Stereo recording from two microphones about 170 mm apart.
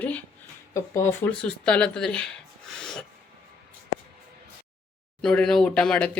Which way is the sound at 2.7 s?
Centre (ahead or behind).